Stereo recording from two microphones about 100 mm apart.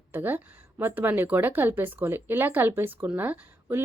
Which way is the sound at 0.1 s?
20° right (ahead or behind).